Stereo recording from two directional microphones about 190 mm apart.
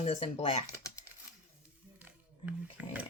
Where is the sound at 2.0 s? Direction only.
10° right (ahead or behind).